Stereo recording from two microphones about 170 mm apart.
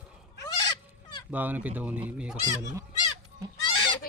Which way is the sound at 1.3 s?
10° right (ahead or behind).